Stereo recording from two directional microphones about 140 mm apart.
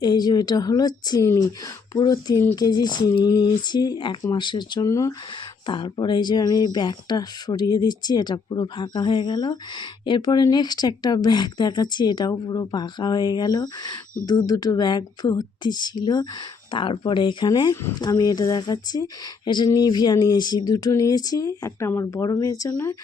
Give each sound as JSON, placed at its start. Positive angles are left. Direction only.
{"t": 0.0, "sound": "speech", "side_deg": 30}
{"t": 4.9, "sound": "speech", "side_deg": 20}
{"t": 5.6, "sound": "speech", "side_deg": 35}